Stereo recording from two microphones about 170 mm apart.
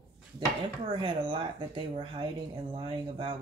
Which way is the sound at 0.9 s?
30° right (ahead or behind).